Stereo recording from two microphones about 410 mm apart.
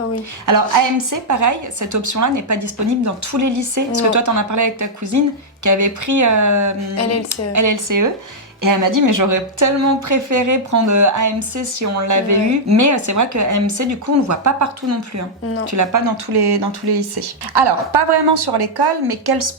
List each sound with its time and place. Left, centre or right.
0.4 s a woman's voice: right